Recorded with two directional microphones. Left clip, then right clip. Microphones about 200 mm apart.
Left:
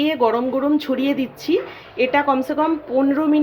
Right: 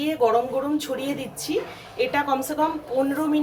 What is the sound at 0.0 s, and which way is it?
A woman's voice, 25° left (ahead or behind).